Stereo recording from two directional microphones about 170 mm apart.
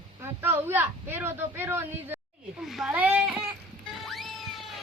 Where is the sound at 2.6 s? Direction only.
Centre (ahead or behind).